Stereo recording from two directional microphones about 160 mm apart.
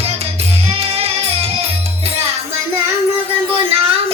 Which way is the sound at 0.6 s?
40° right (ahead or behind).